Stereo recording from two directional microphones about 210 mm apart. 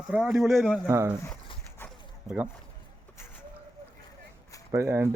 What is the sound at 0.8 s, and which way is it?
Speech, 15° right (ahead or behind).